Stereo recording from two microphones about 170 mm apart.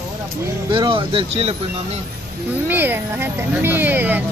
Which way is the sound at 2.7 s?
10° right (ahead or behind).